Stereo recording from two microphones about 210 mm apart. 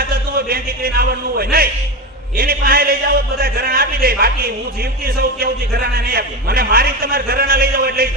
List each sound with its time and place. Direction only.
0.3 s speech: 45° right (ahead or behind)